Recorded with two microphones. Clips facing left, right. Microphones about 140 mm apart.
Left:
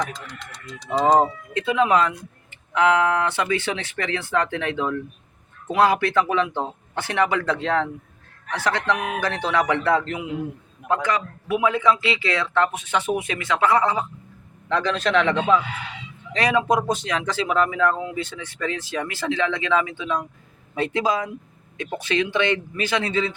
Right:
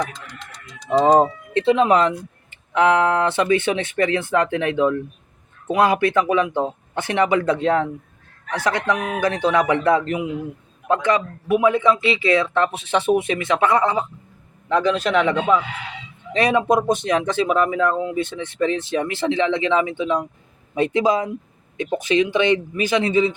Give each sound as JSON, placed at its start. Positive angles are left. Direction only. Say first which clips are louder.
{"t": 0.9, "sound": "speech", "louder": "right 3 dB", "side_deg": -25}
{"t": 16.3, "sound": "speech", "louder": "right 3 dB", "side_deg": -25}